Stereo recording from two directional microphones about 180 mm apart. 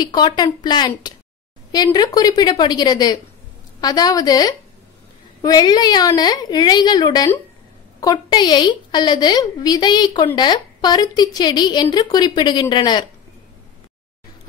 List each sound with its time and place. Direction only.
0.0 s a woman's voice: 25° left (ahead or behind)